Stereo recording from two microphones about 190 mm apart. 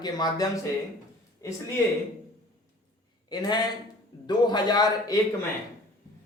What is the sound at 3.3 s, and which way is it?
Speech, 20° left (ahead or behind).